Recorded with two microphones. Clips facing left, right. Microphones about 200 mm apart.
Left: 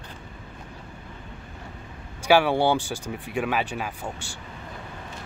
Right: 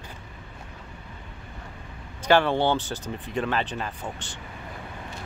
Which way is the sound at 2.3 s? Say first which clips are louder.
Left 1 dB; 10° left (ahead or behind).